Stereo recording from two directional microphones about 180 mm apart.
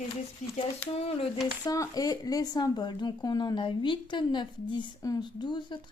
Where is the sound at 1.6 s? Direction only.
20° left (ahead or behind).